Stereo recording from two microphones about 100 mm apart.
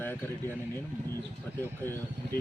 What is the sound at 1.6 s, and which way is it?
Speech, 20° left (ahead or behind).